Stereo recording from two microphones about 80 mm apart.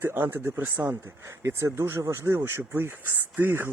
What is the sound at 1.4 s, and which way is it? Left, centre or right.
Speech, right.